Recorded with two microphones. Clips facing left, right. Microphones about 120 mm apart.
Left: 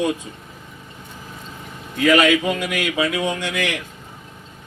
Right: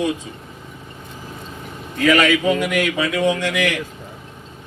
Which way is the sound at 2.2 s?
15° left (ahead or behind).